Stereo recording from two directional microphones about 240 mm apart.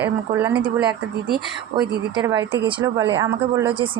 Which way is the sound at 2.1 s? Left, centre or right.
Centre.